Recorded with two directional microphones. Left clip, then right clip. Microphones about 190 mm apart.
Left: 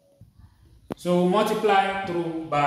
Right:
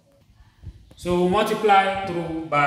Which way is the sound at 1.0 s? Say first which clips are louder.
Right 1 dB; 55° left (ahead or behind).